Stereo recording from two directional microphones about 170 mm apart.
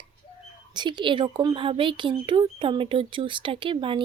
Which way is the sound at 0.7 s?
25° right (ahead or behind).